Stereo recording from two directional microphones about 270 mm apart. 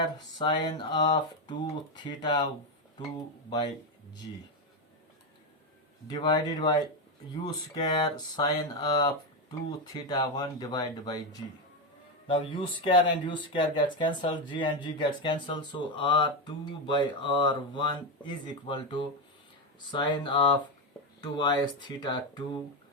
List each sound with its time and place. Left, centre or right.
0.3 s speech: centre
6.1 s speech: centre